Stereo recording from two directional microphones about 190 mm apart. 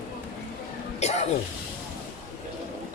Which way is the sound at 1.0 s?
35° left (ahead or behind).